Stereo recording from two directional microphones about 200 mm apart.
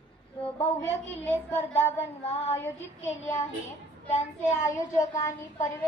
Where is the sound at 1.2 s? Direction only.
10° left (ahead or behind).